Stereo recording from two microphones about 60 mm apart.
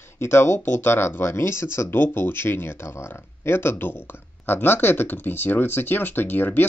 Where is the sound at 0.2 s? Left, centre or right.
Left.